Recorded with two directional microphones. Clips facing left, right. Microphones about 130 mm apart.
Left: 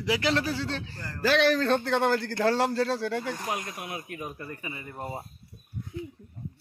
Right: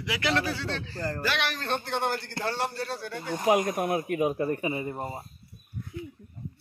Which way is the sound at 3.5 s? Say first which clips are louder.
Right 10 dB; 55° right (ahead or behind).